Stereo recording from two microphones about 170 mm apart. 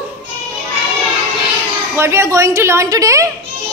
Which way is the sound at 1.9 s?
15° right (ahead or behind).